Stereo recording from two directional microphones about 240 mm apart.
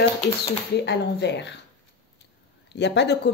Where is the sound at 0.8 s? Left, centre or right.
Left.